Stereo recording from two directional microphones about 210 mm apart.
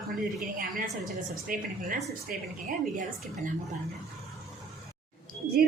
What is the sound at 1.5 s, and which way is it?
Speech, 45° right (ahead or behind).